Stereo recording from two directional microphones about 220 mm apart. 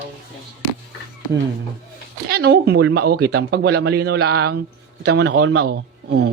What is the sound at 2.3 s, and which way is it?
A man's voice, 50° right (ahead or behind).